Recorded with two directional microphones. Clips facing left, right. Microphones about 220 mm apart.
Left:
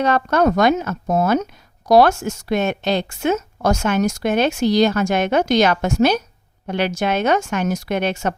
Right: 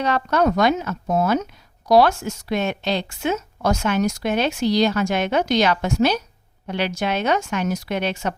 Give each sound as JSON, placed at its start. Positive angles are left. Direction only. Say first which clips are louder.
{"t": 0.0, "sound": "a woman's voice", "louder": "left 3 dB", "side_deg": 50}